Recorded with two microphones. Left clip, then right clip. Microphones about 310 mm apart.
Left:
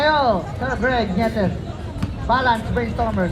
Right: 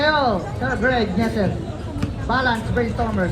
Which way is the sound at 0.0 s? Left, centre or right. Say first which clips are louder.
Left 1 dB; left.